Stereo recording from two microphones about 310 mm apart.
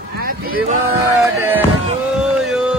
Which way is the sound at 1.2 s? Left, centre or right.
Centre.